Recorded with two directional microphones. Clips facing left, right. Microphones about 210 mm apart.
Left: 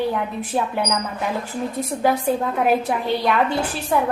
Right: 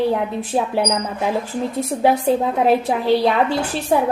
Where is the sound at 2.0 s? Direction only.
25° right (ahead or behind).